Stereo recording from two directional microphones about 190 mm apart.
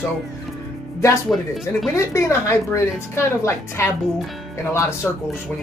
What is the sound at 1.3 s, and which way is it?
Speech, centre (ahead or behind).